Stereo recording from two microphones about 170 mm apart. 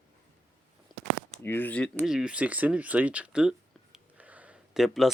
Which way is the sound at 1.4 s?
10° left (ahead or behind).